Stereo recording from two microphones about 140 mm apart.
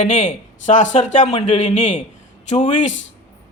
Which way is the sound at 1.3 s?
45° left (ahead or behind).